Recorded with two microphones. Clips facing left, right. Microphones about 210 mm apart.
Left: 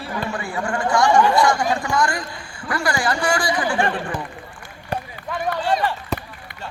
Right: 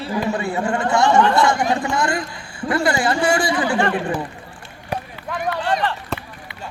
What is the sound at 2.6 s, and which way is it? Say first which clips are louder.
A man's voice: right 4 dB; 25° right (ahead or behind).